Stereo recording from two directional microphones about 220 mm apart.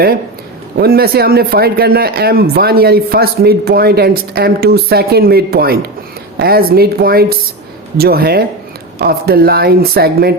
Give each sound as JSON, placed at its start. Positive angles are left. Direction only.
{"t": 0.8, "sound": "speech", "side_deg": -45}